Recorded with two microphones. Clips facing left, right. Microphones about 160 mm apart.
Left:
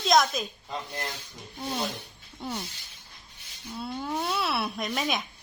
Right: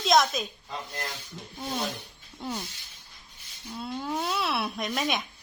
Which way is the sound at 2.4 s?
5° left (ahead or behind).